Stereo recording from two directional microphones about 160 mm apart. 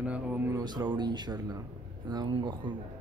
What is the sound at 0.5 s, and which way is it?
Speech, 25° right (ahead or behind).